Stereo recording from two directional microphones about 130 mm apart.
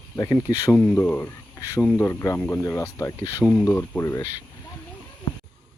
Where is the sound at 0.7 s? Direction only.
15° left (ahead or behind).